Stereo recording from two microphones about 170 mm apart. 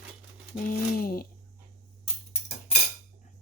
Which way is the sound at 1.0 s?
60° left (ahead or behind).